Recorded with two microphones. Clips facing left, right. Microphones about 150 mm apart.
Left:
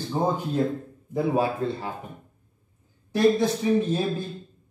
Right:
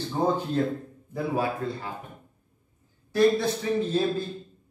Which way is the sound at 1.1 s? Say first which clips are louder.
Left 4 dB; 25° left (ahead or behind).